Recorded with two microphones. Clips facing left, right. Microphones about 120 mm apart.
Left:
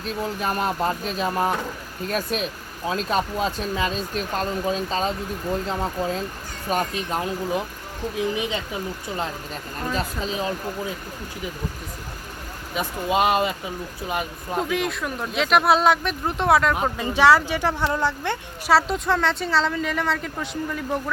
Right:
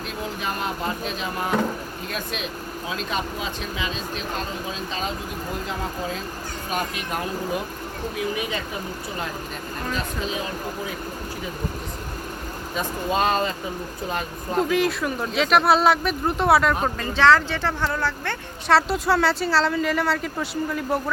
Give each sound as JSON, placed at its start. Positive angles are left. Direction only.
{"t": 0.3, "sound": "speech", "side_deg": 45}
{"t": 6.7, "sound": "speech", "side_deg": 40}
{"t": 8.1, "sound": "speech", "side_deg": 25}
{"t": 9.9, "sound": "speech", "side_deg": 35}
{"t": 12.7, "sound": "speech", "side_deg": 15}
{"t": 14.6, "sound": "a woman's voice", "side_deg": 0}
{"t": 16.7, "sound": "speech", "side_deg": 15}
{"t": 18.7, "sound": "a woman's voice", "side_deg": 0}